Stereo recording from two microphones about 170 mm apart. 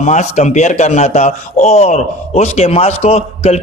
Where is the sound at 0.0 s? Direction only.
45° left (ahead or behind).